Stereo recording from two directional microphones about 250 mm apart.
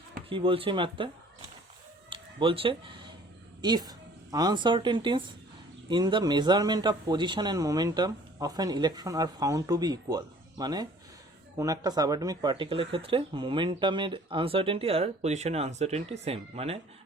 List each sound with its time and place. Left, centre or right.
0.3 s speech: right
2.0 s a sound: right
3.6 s speech: centre